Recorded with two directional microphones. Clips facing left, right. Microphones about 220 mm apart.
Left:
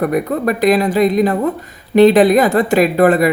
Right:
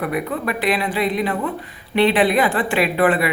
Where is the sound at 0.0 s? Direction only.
45° left (ahead or behind).